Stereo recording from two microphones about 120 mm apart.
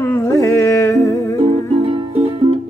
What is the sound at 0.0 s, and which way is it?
Music, 20° left (ahead or behind).